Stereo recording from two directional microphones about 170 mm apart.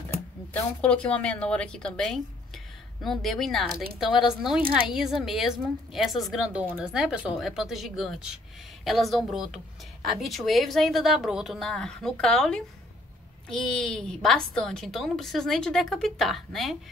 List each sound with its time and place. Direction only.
0.5 s a woman's voice: 5° left (ahead or behind)